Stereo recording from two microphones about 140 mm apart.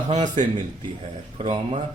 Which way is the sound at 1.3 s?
35° right (ahead or behind).